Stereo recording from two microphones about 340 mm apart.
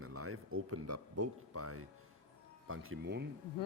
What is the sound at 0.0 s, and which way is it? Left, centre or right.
Speech, right.